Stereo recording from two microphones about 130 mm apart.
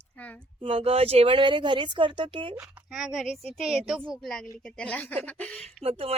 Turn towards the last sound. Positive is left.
turn(degrees=-45)  # may be behind; listen again after turning